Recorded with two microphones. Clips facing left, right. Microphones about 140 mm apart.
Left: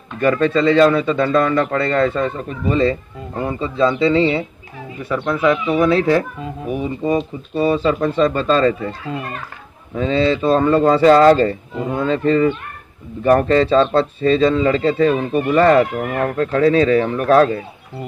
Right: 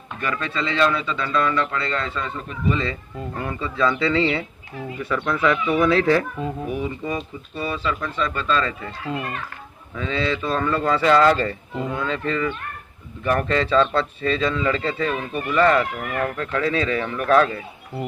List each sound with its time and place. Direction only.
0.2 s speech: 45° left (ahead or behind)
3.3 s speech: 25° left (ahead or behind)
5.7 s speech: 30° left (ahead or behind)